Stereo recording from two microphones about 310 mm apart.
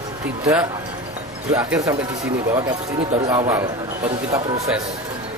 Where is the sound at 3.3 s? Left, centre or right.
Centre.